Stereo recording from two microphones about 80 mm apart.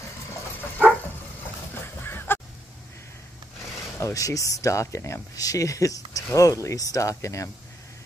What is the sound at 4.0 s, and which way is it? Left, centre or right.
Speech, left.